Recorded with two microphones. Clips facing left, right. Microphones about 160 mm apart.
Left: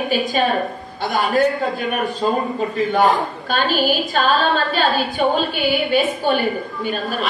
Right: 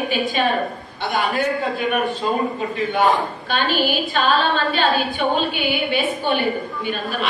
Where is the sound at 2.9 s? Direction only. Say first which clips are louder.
Even; 40° left (ahead or behind).